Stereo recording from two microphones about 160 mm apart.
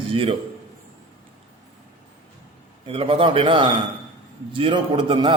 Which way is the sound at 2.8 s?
35° right (ahead or behind).